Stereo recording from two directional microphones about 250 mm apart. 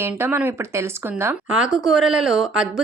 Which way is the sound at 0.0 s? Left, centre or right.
Centre.